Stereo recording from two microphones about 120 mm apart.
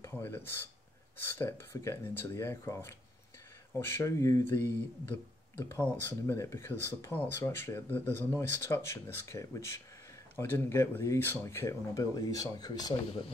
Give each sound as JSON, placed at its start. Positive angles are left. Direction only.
{"t": 0.0, "sound": "speech", "side_deg": 15}